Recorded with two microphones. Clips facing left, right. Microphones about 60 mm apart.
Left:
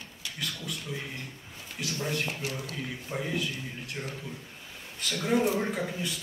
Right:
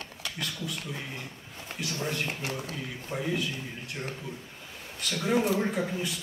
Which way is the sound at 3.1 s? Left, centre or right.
Centre.